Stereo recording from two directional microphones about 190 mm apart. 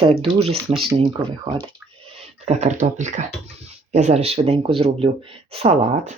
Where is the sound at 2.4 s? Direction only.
35° right (ahead or behind).